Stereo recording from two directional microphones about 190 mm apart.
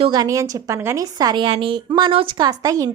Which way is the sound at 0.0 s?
20° right (ahead or behind).